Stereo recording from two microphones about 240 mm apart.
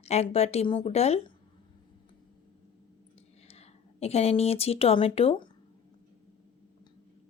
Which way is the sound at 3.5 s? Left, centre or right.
Left.